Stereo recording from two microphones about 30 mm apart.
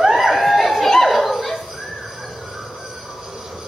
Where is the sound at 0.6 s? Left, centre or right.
Centre.